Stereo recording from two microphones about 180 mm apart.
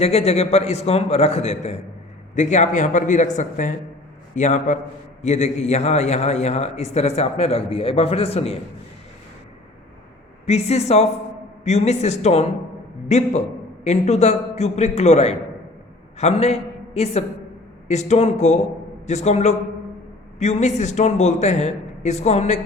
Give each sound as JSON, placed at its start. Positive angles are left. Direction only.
{"t": 0.0, "sound": "a man's voice", "side_deg": 35}
{"t": 10.4, "sound": "a man's voice", "side_deg": 35}